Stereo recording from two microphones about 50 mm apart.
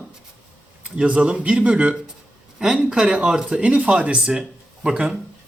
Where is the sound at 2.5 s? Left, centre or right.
Centre.